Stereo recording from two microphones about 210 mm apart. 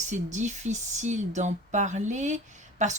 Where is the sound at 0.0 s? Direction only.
35° right (ahead or behind).